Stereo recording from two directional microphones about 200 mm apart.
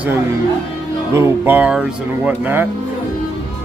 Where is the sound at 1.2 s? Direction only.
10° right (ahead or behind).